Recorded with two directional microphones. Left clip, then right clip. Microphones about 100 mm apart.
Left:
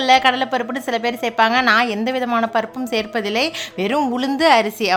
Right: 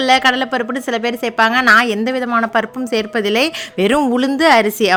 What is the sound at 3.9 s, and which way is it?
Speech, 30° right (ahead or behind).